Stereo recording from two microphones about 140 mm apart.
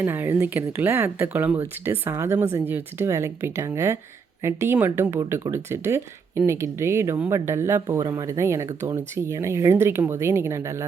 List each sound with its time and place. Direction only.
0.0 s speech: 15° right (ahead or behind)